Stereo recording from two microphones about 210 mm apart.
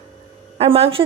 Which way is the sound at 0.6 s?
25° right (ahead or behind).